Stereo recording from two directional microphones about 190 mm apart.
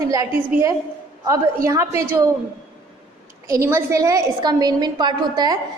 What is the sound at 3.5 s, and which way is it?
A woman's voice, 15° right (ahead or behind).